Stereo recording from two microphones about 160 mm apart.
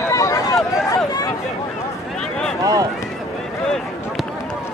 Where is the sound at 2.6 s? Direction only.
20° right (ahead or behind).